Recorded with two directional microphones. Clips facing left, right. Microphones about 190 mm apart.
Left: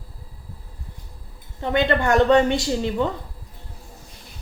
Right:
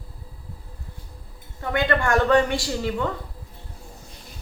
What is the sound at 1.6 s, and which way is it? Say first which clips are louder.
A woman's voice: left 3 dB; 25° left (ahead or behind).